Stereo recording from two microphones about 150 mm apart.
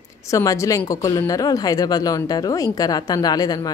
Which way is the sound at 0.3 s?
20° left (ahead or behind).